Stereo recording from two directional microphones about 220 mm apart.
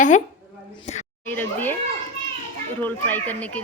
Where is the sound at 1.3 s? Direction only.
10° left (ahead or behind).